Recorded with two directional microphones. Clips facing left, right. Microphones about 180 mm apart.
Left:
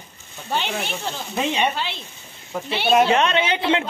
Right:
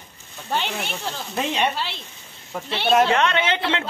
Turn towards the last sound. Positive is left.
turn(degrees=20)  # may be behind; listen again after turning